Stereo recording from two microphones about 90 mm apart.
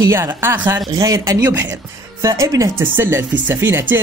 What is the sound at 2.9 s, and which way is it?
Speech, 25° right (ahead or behind).